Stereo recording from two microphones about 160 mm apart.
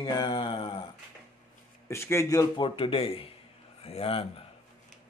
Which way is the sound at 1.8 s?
15° left (ahead or behind).